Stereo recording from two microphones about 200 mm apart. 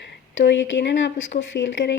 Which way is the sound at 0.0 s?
65° left (ahead or behind).